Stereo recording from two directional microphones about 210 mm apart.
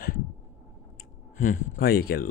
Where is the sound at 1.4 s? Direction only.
40° left (ahead or behind).